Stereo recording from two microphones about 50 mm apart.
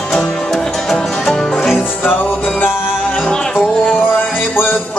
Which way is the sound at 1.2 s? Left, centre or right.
Centre.